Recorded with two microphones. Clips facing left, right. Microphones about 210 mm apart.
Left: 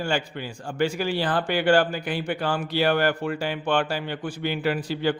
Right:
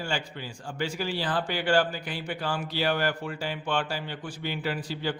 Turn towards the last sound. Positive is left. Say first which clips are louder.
# left 6 dB
turn(degrees=60)  # may be behind; listen again after turning